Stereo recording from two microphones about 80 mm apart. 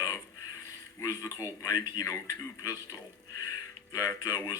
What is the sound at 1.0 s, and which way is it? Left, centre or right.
A man's voice, left.